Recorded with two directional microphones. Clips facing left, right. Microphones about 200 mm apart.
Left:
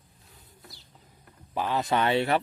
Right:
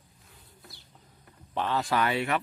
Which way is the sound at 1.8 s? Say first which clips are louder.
Left 6 dB; 25° left (ahead or behind).